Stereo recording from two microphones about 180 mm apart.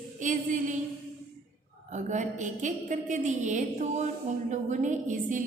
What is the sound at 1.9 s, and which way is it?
A woman's voice, 40° right (ahead or behind).